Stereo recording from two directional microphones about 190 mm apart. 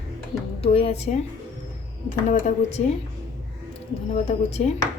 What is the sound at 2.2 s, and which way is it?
Speech, 35° left (ahead or behind).